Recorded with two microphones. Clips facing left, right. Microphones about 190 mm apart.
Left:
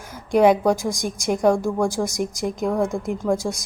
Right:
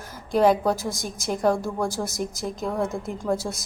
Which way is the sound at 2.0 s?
Centre (ahead or behind).